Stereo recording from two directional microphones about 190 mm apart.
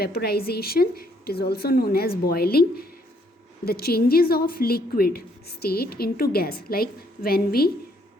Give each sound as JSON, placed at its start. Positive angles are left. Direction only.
{"t": 0.0, "sound": "speech", "side_deg": 55}